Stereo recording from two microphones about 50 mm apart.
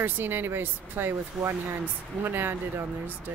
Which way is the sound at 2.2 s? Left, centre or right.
Right.